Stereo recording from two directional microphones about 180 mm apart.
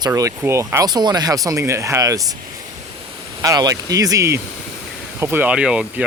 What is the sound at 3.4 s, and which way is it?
Speech, 20° right (ahead or behind).